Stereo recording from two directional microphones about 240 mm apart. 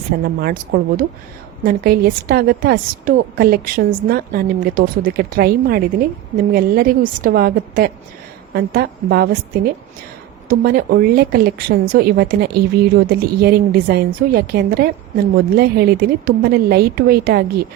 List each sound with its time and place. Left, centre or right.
0.2 s a woman's voice: right